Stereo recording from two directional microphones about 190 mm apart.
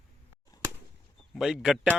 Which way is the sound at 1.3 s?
Centre (ahead or behind).